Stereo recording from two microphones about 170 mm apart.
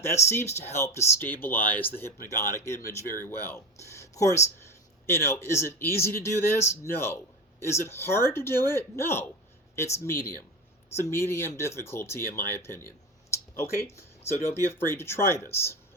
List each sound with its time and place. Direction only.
0.0 s speech: 15° left (ahead or behind)